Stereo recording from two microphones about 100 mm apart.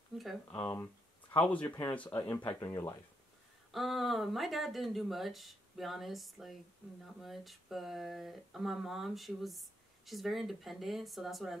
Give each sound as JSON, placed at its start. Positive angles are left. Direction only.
{"t": 0.1, "sound": "speech", "side_deg": 0}
{"t": 1.4, "sound": "speech", "side_deg": 15}
{"t": 3.7, "sound": "speech", "side_deg": 0}